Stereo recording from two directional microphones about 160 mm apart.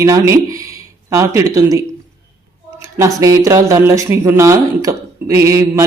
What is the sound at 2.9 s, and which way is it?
Speech, 20° right (ahead or behind).